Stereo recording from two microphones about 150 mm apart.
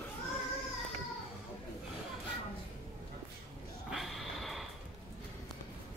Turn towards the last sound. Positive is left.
turn(degrees=0)  # may be behind; listen again after turning